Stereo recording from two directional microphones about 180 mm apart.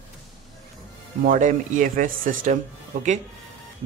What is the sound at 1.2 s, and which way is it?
Speech, 45° right (ahead or behind).